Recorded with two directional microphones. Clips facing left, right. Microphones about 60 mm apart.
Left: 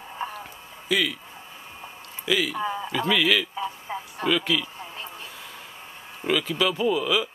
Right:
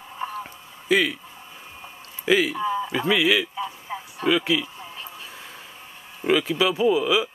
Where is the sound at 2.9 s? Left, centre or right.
Centre.